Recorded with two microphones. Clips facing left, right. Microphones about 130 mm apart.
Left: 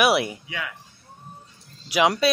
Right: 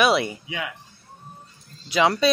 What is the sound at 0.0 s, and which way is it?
Speech, 5° left (ahead or behind).